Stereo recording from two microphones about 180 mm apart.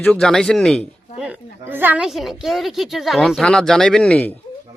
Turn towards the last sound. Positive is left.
turn(degrees=5)  # may be behind; listen again after turning